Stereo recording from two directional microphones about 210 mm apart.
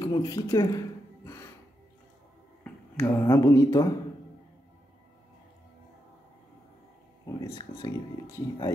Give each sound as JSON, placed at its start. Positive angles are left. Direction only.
{"t": 0.0, "sound": "a sound", "side_deg": 20}
{"t": 2.6, "sound": "speech", "side_deg": 10}
{"t": 7.2, "sound": "speech", "side_deg": 20}